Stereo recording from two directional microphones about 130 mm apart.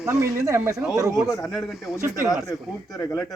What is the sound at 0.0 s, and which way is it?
Speech, 25° right (ahead or behind).